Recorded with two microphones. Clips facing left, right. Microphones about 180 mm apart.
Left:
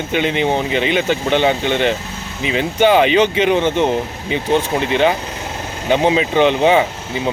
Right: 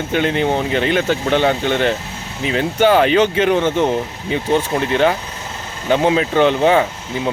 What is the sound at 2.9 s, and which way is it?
Speech, 10° left (ahead or behind).